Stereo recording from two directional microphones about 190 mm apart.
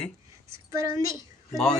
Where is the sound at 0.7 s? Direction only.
15° right (ahead or behind).